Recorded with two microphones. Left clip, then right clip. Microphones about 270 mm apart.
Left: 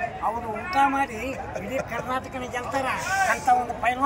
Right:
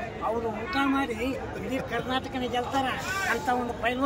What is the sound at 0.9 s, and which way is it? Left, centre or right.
A man's voice, centre.